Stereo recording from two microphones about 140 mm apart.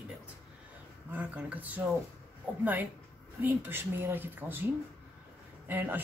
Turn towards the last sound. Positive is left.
turn(degrees=-15)  # may be behind; listen again after turning